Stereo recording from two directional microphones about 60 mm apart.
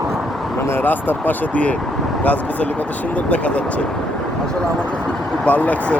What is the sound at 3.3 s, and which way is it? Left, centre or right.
Speech, left.